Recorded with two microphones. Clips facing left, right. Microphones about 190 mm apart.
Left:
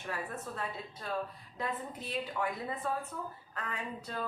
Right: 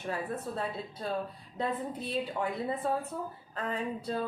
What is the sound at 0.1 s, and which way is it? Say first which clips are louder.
A woman's voice: right 5 dB; 30° right (ahead or behind).